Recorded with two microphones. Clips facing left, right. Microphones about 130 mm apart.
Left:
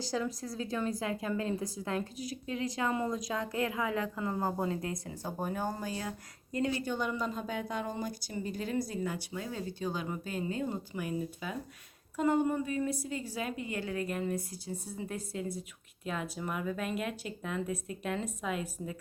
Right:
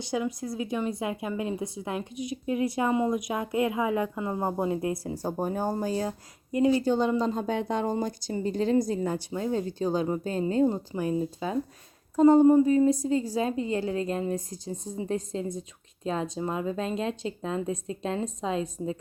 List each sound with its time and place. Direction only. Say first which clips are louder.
0.4 s a woman's voice: right 5 dB; 20° right (ahead or behind)
8.9 s a woman's voice: right 7 dB; 40° right (ahead or behind)